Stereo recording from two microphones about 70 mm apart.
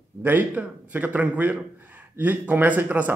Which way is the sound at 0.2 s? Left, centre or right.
Right.